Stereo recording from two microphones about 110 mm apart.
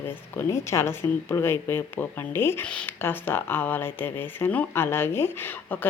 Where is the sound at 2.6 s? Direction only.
10° left (ahead or behind).